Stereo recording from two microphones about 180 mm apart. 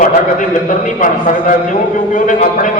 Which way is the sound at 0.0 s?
45° left (ahead or behind).